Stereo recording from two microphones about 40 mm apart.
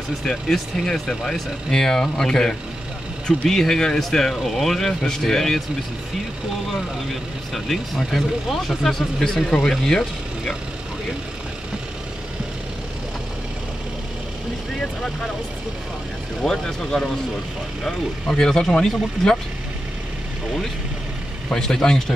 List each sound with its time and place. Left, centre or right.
0.2 s speech: centre
7.5 s speech: centre
16.4 s speech: centre
18.3 s speech: centre
21.8 s speech: centre